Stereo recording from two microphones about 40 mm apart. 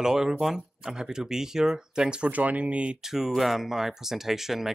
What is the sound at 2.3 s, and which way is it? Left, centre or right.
Speech, right.